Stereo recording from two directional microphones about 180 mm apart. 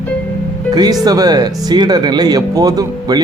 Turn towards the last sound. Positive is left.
turn(degrees=-20)  # may be behind; listen again after turning